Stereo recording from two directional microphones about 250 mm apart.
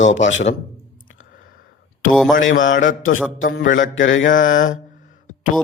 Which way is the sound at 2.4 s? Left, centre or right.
Left.